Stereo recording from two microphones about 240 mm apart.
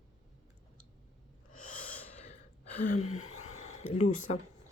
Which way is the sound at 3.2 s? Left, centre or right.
Left.